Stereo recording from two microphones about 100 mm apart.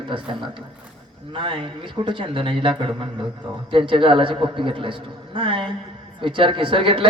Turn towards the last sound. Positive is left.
turn(degrees=-60)  # may be behind; listen again after turning